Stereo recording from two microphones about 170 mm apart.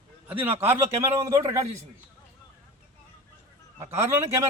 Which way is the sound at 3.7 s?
15° right (ahead or behind).